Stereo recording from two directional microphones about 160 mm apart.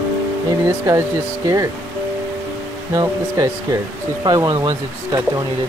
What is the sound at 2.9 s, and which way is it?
Speech, 20° right (ahead or behind).